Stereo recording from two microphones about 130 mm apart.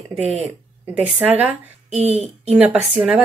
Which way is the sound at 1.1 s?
15° right (ahead or behind).